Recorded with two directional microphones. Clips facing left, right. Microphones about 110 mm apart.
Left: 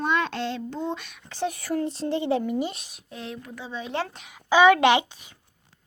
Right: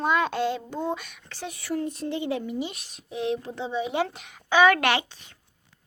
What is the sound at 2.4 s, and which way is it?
Speech, 50° left (ahead or behind).